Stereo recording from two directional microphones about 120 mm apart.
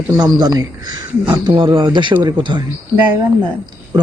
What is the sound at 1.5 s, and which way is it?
Speech, 45° right (ahead or behind).